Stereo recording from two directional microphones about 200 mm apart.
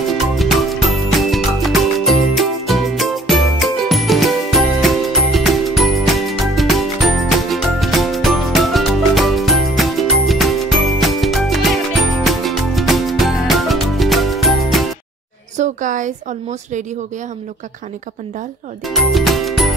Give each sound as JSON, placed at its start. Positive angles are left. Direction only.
{"t": 0.4, "sound": "music", "side_deg": 0}
{"t": 15.5, "sound": "a sound", "side_deg": -40}
{"t": 18.9, "sound": "speech", "side_deg": 0}